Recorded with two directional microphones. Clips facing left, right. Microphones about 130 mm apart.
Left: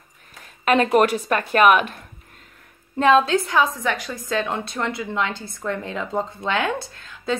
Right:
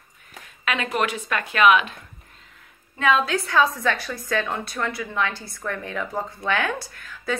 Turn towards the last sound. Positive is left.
turn(degrees=25)  # may be behind; listen again after turning